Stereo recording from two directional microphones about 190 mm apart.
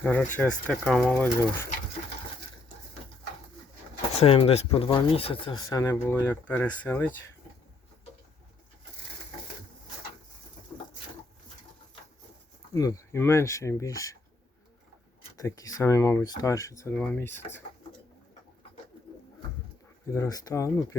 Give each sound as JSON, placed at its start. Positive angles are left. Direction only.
{"t": 0.0, "sound": "speech", "side_deg": 10}
{"t": 1.1, "sound": "speech", "side_deg": 10}
{"t": 4.1, "sound": "speech", "side_deg": 30}
{"t": 10.7, "sound": "a sound", "side_deg": 20}
{"t": 12.7, "sound": "speech", "side_deg": 20}
{"t": 15.4, "sound": "speech", "side_deg": 20}
{"t": 20.1, "sound": "speech", "side_deg": 15}